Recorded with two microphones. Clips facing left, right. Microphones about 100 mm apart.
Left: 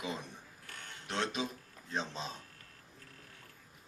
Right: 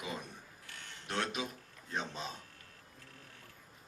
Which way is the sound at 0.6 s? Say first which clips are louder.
Left 3 dB; 45° left (ahead or behind).